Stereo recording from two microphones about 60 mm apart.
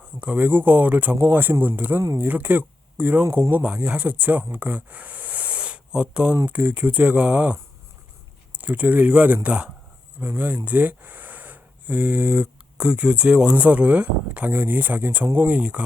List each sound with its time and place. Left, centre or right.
0.2 s speech: right
4.5 s a sound: right
6.5 s speech: right